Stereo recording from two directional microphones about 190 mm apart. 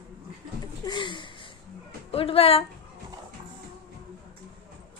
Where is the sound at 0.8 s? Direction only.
25° left (ahead or behind).